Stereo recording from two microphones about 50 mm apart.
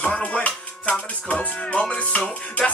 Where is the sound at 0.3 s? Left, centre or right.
Left.